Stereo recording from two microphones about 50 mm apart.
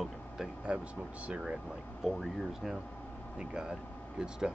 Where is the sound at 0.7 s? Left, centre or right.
Right.